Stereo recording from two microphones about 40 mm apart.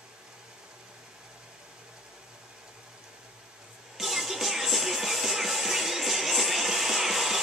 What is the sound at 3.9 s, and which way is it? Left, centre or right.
Music, centre.